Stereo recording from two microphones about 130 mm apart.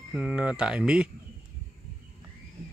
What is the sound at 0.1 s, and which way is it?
Speech, 5° right (ahead or behind).